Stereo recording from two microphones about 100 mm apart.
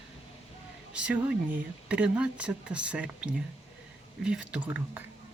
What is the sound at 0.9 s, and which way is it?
Speech, 10° right (ahead or behind).